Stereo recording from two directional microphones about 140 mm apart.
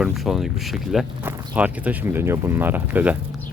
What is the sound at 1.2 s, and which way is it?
Speech, 10° right (ahead or behind).